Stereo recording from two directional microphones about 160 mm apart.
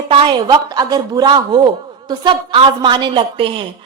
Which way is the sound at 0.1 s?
30° right (ahead or behind).